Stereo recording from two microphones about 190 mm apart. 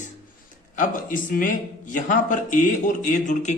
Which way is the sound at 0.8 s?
45° left (ahead or behind).